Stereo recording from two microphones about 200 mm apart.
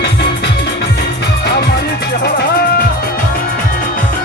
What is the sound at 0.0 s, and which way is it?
Music, 55° left (ahead or behind).